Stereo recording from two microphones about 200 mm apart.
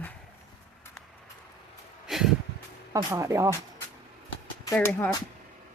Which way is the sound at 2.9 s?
15° right (ahead or behind).